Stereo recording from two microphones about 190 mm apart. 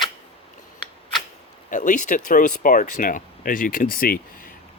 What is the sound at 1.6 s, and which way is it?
Speech, 45° left (ahead or behind).